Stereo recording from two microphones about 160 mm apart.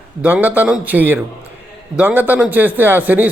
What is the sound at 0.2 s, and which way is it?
A man's voice, 10° right (ahead or behind).